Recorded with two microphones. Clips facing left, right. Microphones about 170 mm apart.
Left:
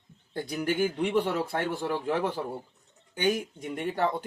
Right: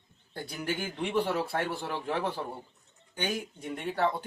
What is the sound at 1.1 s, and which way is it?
Speech, 15° left (ahead or behind).